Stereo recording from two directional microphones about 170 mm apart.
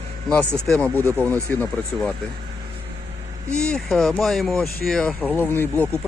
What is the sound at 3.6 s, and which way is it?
Speech, 5° left (ahead or behind).